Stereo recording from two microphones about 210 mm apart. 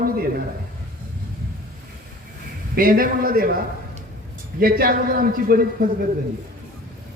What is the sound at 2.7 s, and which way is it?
Speech, 45° right (ahead or behind).